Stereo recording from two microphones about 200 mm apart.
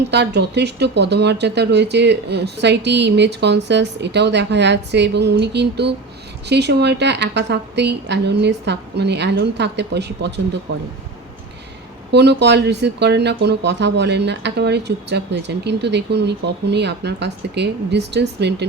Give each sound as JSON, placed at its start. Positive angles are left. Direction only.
{"t": 0.1, "sound": "speech", "side_deg": -60}
{"t": 12.1, "sound": "speech", "side_deg": -60}